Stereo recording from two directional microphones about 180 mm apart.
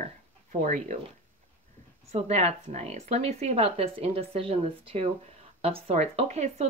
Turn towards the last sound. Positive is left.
turn(degrees=-40)  # may be behind; listen again after turning